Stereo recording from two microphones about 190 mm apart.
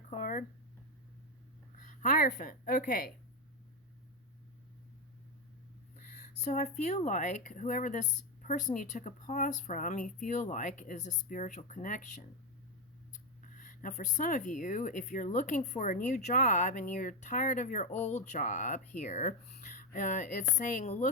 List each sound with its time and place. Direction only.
0.1 s a sound: 40° left (ahead or behind)
1.7 s a woman's voice: 40° left (ahead or behind)
6.0 s speech: 40° left (ahead or behind)
13.5 s speech: 45° left (ahead or behind)